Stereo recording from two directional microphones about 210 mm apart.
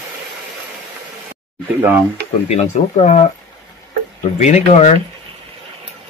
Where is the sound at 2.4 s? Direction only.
30° left (ahead or behind).